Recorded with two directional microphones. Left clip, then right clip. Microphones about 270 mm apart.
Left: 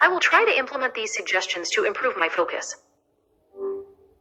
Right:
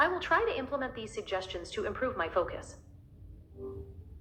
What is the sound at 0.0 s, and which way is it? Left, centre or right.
A woman's voice, left.